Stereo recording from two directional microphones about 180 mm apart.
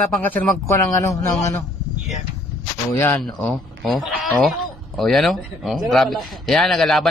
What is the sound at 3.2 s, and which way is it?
A man's voice, centre (ahead or behind).